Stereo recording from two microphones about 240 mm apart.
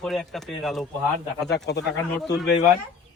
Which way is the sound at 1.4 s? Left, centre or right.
Left.